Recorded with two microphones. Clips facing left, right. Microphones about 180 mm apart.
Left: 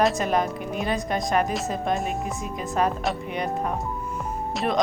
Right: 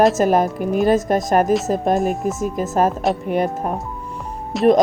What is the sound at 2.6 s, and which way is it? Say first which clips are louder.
Speech: right 6 dB; 45° right (ahead or behind).